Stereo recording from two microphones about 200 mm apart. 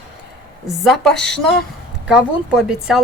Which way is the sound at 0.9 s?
5° left (ahead or behind).